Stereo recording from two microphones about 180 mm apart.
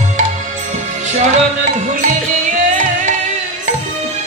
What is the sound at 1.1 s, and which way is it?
Music, 40° right (ahead or behind).